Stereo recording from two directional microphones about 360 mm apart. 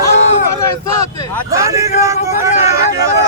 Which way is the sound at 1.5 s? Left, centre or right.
Centre.